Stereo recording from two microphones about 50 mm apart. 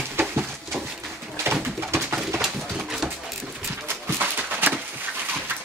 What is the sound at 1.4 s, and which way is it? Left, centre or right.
Pigeon, right.